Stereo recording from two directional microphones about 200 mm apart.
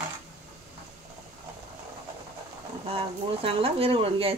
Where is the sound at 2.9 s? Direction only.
30° right (ahead or behind).